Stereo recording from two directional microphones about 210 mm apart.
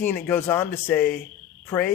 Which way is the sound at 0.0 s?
10° left (ahead or behind).